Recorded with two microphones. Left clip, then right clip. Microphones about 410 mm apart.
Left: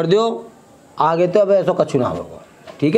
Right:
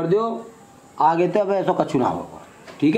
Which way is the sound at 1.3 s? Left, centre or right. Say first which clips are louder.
Left 6 dB; left.